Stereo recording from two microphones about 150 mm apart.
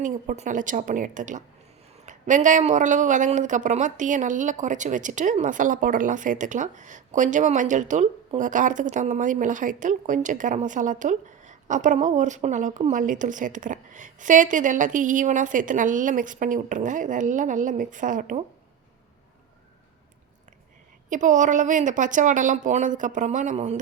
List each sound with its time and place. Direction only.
0.0 s speech: 55° right (ahead or behind)
21.1 s speech: 55° right (ahead or behind)